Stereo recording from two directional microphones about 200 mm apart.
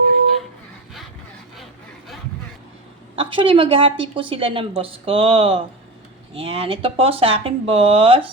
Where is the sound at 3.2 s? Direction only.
25° right (ahead or behind).